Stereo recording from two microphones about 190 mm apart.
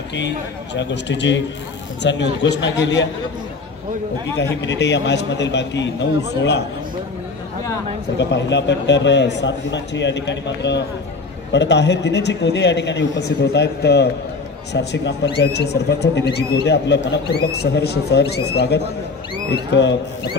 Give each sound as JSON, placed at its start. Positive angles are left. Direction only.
{"t": 0.7, "sound": "a man's voice", "side_deg": 70}
{"t": 4.4, "sound": "a man's voice", "side_deg": 65}
{"t": 8.2, "sound": "a man's voice", "side_deg": 65}